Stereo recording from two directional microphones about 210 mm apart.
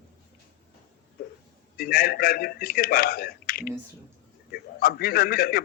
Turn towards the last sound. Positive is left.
turn(degrees=45)  # may be behind; listen again after turning